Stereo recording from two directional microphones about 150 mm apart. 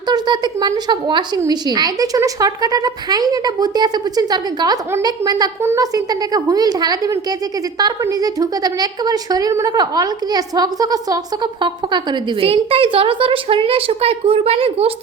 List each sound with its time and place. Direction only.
0.1 s a woman's voice: 30° right (ahead or behind)